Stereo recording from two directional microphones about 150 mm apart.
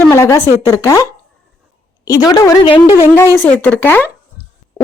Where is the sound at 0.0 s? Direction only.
20° left (ahead or behind).